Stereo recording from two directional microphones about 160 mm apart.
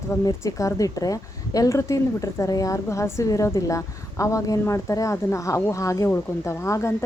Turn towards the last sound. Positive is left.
turn(degrees=15)  # may be behind; listen again after turning